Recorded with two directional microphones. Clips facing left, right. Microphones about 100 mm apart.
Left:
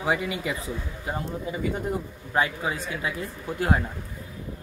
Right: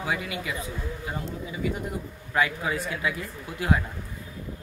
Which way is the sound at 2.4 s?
30° left (ahead or behind).